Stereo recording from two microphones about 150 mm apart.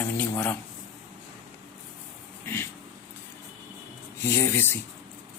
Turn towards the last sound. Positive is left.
turn(degrees=15)  # may be behind; listen again after turning